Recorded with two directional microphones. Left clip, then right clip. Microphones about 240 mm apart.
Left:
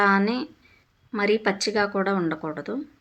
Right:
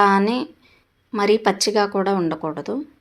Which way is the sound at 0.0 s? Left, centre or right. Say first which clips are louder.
Right 4 dB; centre.